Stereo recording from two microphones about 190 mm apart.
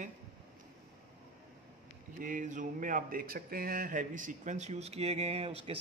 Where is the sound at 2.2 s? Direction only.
45° right (ahead or behind).